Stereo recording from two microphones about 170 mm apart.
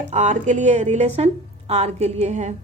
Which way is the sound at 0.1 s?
45° right (ahead or behind).